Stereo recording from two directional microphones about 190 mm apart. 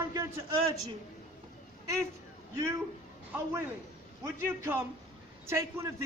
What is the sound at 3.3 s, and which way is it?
A man's voice, 15° right (ahead or behind).